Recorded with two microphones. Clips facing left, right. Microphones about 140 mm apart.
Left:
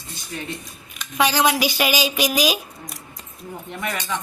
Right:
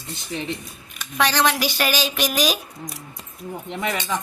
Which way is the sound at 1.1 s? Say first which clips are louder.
Left 1 dB; 10° left (ahead or behind).